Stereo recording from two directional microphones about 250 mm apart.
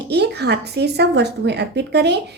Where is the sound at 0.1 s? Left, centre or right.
Right.